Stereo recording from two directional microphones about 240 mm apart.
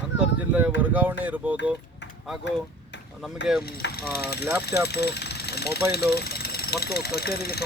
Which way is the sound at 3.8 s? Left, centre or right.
Left.